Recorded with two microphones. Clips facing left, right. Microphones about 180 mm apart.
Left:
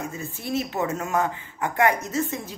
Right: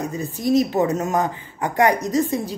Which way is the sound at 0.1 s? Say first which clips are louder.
Right 9 dB; 40° right (ahead or behind).